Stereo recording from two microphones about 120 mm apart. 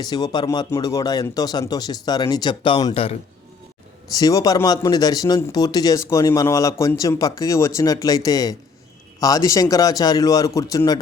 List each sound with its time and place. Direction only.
0.0 s speech: 35° left (ahead or behind); by 3.2 s 55° left (ahead or behind)
4.1 s speech: 30° left (ahead or behind)